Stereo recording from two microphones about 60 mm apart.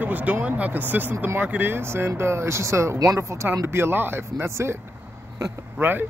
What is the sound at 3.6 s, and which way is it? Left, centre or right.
Speech, right.